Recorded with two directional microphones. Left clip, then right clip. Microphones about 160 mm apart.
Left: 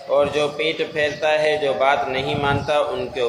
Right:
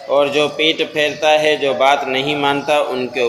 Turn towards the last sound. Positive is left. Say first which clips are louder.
# right 4 dB
turn(degrees=-30)  # may be behind; listen again after turning